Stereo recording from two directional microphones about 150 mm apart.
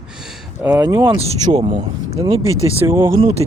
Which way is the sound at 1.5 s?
30° right (ahead or behind).